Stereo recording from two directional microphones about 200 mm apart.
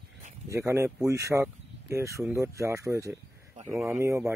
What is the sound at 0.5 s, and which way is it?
Speech, 15° right (ahead or behind).